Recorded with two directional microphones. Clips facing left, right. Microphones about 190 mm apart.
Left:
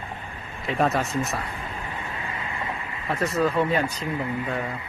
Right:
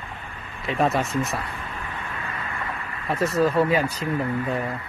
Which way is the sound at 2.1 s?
20° left (ahead or behind).